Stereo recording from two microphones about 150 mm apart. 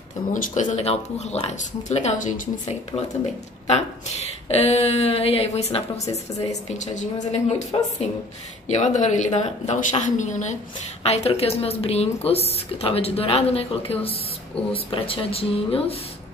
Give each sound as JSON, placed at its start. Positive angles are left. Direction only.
{"t": 0.3, "sound": "a woman's voice", "side_deg": 60}
{"t": 3.6, "sound": "a woman's voice", "side_deg": 45}
{"t": 7.7, "sound": "speech", "side_deg": 35}
{"t": 8.6, "sound": "a woman's voice", "side_deg": 50}
{"t": 11.1, "sound": "a woman's voice", "side_deg": 40}